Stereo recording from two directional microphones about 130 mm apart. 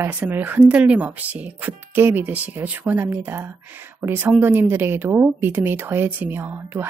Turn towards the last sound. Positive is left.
turn(degrees=-15)  # may be behind; listen again after turning